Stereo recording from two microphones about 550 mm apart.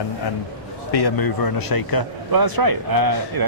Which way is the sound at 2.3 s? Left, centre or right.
Right.